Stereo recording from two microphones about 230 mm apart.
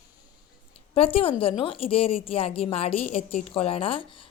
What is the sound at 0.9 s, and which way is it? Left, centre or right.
A woman's voice, left.